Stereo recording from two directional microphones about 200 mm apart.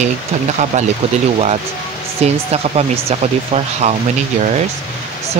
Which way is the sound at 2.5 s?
30° right (ahead or behind).